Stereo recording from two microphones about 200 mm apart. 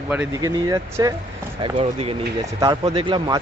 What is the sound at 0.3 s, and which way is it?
Speech, 20° right (ahead or behind).